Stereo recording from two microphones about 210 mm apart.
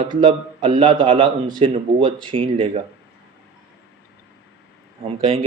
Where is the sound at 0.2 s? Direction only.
25° right (ahead or behind).